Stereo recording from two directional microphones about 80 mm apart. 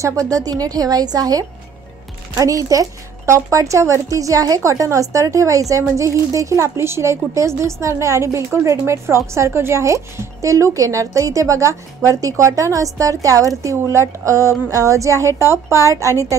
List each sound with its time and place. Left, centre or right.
0.0 s a woman's voice: right